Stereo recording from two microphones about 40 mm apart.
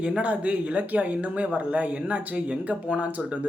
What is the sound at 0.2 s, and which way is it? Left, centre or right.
Speech, right.